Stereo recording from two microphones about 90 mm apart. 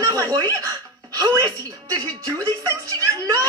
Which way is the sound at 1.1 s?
40° right (ahead or behind).